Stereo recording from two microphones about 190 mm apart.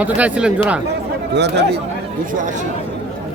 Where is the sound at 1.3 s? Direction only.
65° right (ahead or behind).